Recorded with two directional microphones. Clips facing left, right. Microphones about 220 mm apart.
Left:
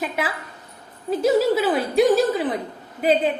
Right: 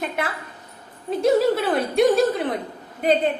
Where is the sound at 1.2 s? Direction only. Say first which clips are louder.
Even; centre (ahead or behind).